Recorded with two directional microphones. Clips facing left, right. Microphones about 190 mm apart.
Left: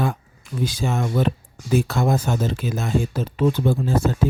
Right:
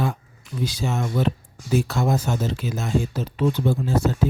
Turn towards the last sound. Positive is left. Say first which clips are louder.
# left 2 dB
turn(degrees=55)  # may be behind; listen again after turning